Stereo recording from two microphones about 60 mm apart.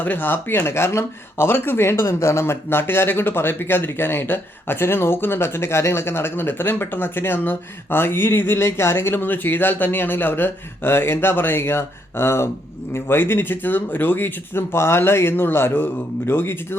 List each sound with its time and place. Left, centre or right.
0.0 s speech: left